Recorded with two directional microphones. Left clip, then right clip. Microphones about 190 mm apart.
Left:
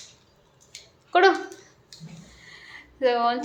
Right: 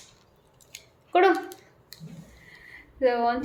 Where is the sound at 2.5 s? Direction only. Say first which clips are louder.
Left 3 dB; centre (ahead or behind).